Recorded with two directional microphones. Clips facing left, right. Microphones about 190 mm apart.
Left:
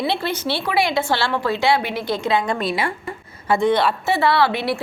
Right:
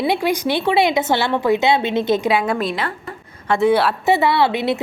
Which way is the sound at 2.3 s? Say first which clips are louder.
Right 1 dB; 5° right (ahead or behind).